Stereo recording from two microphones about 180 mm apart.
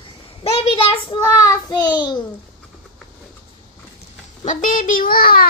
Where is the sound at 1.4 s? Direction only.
20° left (ahead or behind).